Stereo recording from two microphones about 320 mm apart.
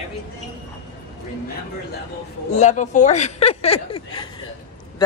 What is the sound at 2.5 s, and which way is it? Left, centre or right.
Speech, left.